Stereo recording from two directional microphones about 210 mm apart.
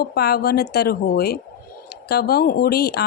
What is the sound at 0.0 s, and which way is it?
Speech, 50° left (ahead or behind).